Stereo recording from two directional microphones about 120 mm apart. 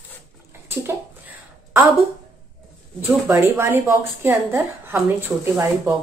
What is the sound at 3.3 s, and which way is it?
A woman's voice, 25° right (ahead or behind).